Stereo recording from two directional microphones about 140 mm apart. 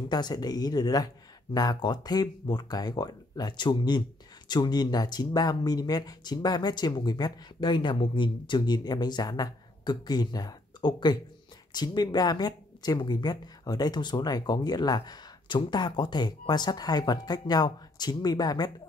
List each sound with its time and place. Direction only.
0.1 s speech: 30° left (ahead or behind)